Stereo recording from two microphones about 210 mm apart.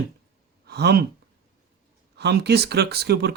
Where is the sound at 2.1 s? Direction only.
55° right (ahead or behind).